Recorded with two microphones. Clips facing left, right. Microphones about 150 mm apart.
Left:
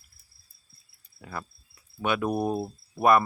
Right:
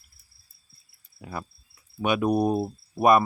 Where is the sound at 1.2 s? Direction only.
15° right (ahead or behind).